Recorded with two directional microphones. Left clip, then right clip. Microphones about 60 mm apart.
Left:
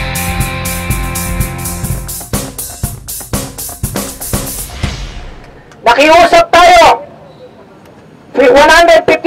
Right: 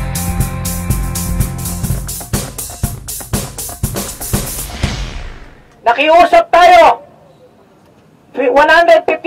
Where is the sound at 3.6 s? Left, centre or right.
Left.